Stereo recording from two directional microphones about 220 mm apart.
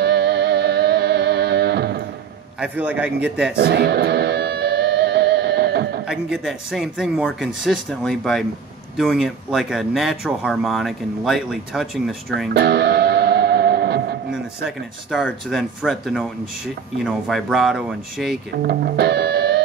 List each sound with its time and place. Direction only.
0.0 s music: 50° right (ahead or behind)
2.6 s speech: 5° right (ahead or behind)
3.5 s music: 45° right (ahead or behind)
6.0 s speech: 5° right (ahead or behind)
12.5 s music: 50° right (ahead or behind)
14.3 s speech: centre (ahead or behind)
18.6 s speech: 45° right (ahead or behind)